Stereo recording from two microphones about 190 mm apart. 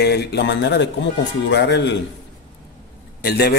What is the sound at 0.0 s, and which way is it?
Speech, 60° left (ahead or behind).